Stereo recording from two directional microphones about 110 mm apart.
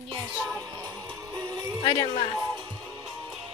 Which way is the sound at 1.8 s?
40° left (ahead or behind).